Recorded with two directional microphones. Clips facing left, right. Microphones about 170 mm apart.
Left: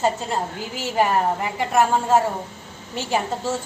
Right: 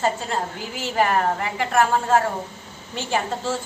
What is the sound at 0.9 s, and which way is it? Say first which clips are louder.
A woman's voice: left 1 dB; 10° left (ahead or behind).